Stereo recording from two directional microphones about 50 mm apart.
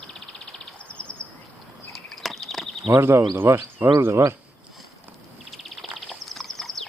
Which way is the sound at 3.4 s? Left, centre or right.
Right.